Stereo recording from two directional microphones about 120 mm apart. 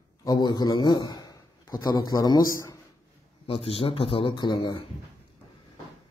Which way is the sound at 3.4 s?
50° left (ahead or behind).